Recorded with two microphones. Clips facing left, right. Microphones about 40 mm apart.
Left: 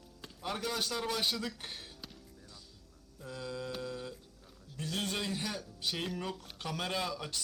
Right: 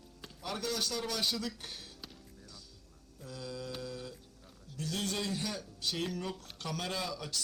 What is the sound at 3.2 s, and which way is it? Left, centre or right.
Mantra, left.